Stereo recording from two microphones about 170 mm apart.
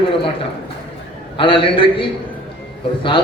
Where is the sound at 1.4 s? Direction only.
30° left (ahead or behind).